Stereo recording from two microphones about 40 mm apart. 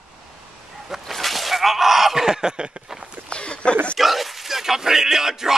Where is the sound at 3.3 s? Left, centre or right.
Left.